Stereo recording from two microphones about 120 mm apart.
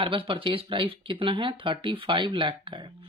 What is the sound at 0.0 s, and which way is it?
Speech, 45° right (ahead or behind).